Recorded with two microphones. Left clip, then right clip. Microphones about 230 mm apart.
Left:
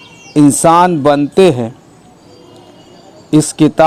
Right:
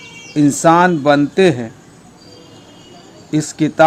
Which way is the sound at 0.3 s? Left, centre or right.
Left.